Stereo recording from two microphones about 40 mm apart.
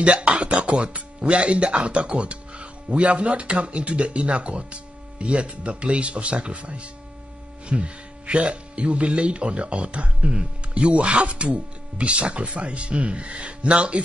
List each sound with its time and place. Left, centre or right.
0.0 s speech: right